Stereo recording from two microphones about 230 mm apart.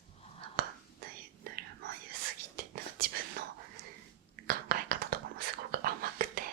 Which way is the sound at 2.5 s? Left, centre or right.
Right.